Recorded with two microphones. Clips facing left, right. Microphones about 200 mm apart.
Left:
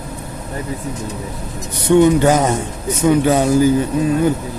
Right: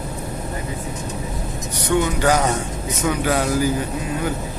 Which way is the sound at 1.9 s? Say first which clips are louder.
Left 8 dB; 20° left (ahead or behind).